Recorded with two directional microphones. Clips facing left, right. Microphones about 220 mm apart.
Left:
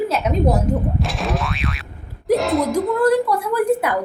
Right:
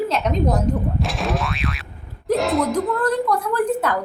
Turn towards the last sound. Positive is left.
turn(degrees=10)  # may be behind; listen again after turning